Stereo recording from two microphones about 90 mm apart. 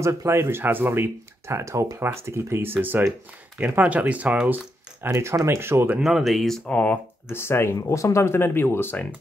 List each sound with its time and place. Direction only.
0.0 s speech: 30° right (ahead or behind); by 4.6 s 15° right (ahead or behind)
5.0 s speech: 30° right (ahead or behind)
6.0 s speech: centre (ahead or behind)
6.7 s speech: 15° left (ahead or behind)
7.2 s speech: 30° left (ahead or behind)